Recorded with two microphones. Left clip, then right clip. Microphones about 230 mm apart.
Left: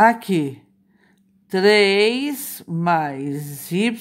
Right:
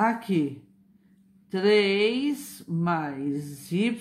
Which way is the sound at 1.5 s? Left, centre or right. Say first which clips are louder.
Left 7 dB; left.